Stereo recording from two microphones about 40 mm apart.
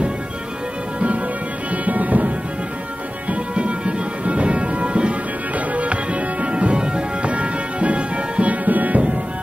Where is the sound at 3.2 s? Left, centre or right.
Right.